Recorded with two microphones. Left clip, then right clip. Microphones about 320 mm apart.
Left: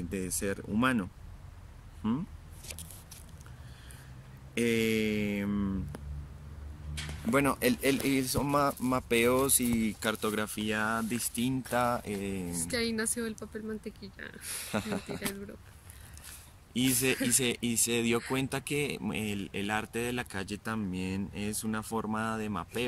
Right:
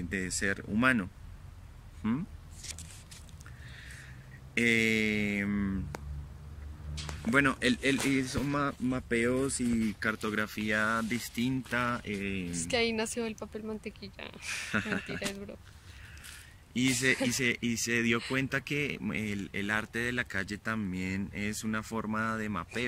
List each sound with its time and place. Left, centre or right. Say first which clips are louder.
0.1 s speech: right 3 dB; centre
4.6 s speech: right 2 dB; centre
7.2 s speech: right 1 dB; centre
12.1 s speech: even; left
12.5 s a woman's voice: right 3 dB; centre
14.7 s speech: right 1 dB; centre
16.7 s speech: right 1 dB; centre